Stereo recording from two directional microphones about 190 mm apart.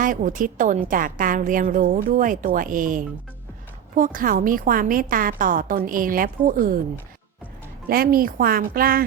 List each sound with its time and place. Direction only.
0.0 s a woman's voice: 45° right (ahead or behind)
7.9 s a woman's voice: 50° right (ahead or behind)